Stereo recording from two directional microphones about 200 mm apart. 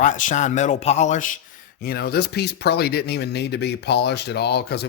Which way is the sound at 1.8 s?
50° left (ahead or behind).